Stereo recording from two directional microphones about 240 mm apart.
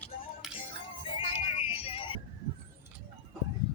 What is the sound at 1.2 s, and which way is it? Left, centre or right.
Music, left.